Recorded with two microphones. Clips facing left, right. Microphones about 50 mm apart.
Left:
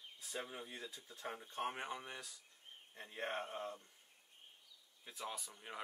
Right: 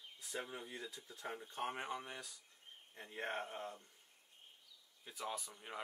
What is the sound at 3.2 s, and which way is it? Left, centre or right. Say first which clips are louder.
Speech: even; left.